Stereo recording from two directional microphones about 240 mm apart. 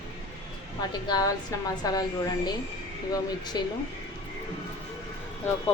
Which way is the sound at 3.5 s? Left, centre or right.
Centre.